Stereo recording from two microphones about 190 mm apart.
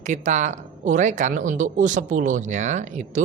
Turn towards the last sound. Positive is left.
turn(degrees=-40)  # may be behind; listen again after turning